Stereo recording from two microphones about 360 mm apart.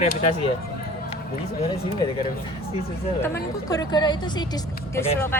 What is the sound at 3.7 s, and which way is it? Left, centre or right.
A woman's voice, centre.